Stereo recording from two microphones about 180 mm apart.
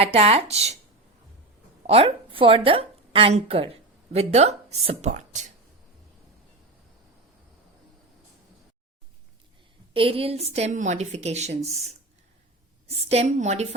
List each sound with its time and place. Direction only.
0.0 s a woman's voice: 35° right (ahead or behind)
1.9 s speech: 35° right (ahead or behind)
9.9 s a woman's voice: 30° right (ahead or behind)